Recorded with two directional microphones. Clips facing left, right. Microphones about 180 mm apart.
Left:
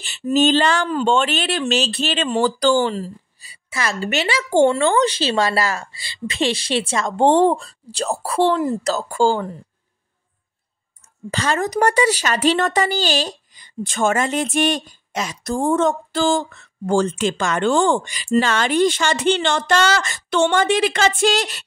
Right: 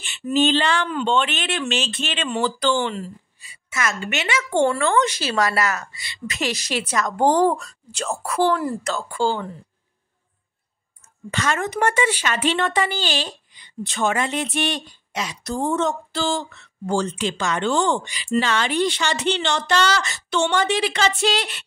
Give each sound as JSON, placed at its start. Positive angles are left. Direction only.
{"t": 0.0, "sound": "speech", "side_deg": 40}
{"t": 8.8, "sound": "speech", "side_deg": 40}
{"t": 11.2, "sound": "speech", "side_deg": 35}